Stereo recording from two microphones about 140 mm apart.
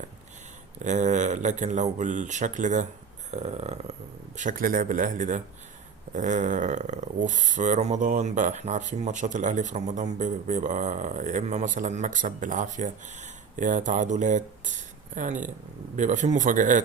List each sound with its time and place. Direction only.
0.8 s speech: 60° right (ahead or behind)
3.3 s burping: 50° right (ahead or behind)
4.4 s speech: 70° right (ahead or behind)